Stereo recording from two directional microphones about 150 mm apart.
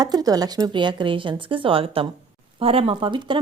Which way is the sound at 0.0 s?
25° right (ahead or behind).